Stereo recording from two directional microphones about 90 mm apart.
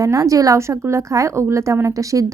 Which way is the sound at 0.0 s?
35° right (ahead or behind).